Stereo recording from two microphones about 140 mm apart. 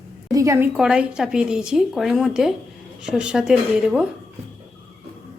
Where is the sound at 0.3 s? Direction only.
25° right (ahead or behind); by 4.0 s 5° right (ahead or behind).